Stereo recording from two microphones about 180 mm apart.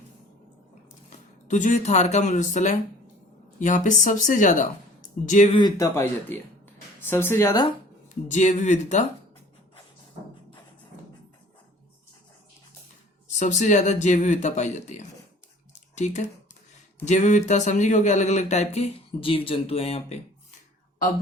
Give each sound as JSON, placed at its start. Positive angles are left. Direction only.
{"t": 1.5, "sound": "speech", "side_deg": 45}
{"t": 5.5, "sound": "speech", "side_deg": 20}
{"t": 8.3, "sound": "speech", "side_deg": 45}
{"t": 13.3, "sound": "speech", "side_deg": 40}
{"t": 15.7, "sound": "a sound", "side_deg": 40}
{"t": 17.1, "sound": "speech", "side_deg": 40}